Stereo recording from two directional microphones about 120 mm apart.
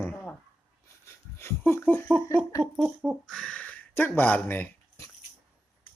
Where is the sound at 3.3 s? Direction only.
10° left (ahead or behind).